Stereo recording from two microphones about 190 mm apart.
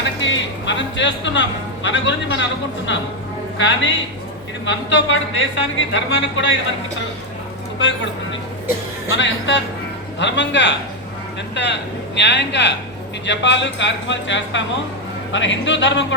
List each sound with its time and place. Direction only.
0.2 s speech: 70° left (ahead or behind)
7.8 s speech: 75° left (ahead or behind)
9.0 s speech: 75° left (ahead or behind)